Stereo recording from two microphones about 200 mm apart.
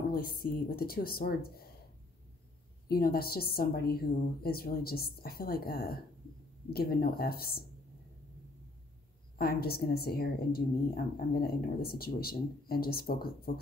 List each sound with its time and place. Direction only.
0.1 s a woman's voice: 45° left (ahead or behind)
2.9 s a woman's voice: 50° left (ahead or behind)
9.4 s a woman's voice: 50° left (ahead or behind)